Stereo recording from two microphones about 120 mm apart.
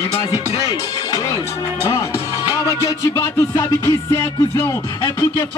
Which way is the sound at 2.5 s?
25° left (ahead or behind).